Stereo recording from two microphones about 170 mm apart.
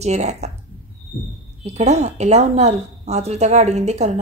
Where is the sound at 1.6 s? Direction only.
40° right (ahead or behind).